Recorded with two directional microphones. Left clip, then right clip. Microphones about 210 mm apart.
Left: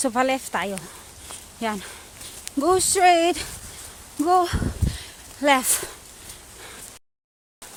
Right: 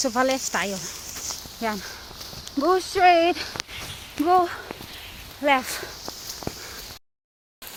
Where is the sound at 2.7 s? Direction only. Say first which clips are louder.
Even; 40° left (ahead or behind).